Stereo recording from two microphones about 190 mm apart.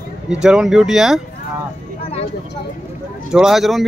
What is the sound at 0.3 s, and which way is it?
Speech, 5° right (ahead or behind).